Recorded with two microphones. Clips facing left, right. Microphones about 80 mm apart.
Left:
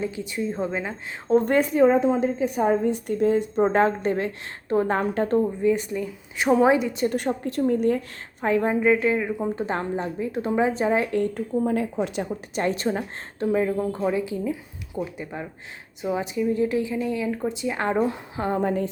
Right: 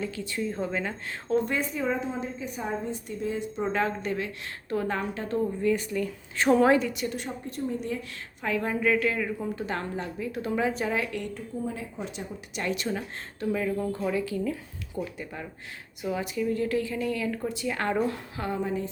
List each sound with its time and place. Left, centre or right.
0.0 s a woman's voice: centre
1.5 s a woman's voice: left
5.4 s a woman's voice: left
7.1 s speech: left
7.8 s a woman's voice: left
8.4 s a woman's voice: left
11.3 s speech: left
12.5 s a woman's voice: left
18.5 s a woman's voice: left